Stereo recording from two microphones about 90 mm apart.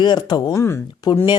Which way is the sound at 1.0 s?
50° left (ahead or behind).